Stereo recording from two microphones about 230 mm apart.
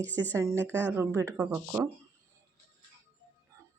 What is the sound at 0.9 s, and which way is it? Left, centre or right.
Speech, centre.